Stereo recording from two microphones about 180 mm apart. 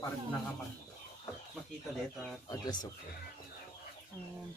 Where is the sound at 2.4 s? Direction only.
20° left (ahead or behind).